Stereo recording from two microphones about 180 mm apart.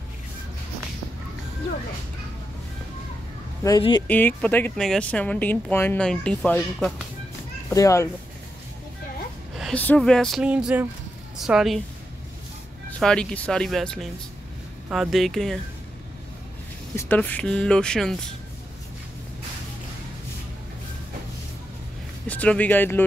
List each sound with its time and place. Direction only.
4.1 s speech: 10° left (ahead or behind)
7.7 s speech: 15° left (ahead or behind)
9.6 s speech: 5° left (ahead or behind)
13.0 s speech: 5° left (ahead or behind)
16.9 s speech: 10° left (ahead or behind)
22.3 s speech: 10° left (ahead or behind)